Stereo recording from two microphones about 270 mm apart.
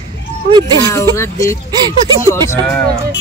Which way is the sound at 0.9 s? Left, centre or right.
Centre.